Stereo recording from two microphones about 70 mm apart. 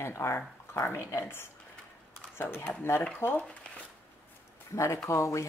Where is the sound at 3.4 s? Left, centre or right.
Centre.